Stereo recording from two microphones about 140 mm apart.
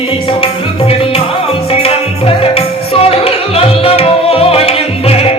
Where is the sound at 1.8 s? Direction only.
45° left (ahead or behind).